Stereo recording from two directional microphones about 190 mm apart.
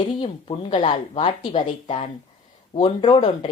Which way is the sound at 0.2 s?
30° left (ahead or behind).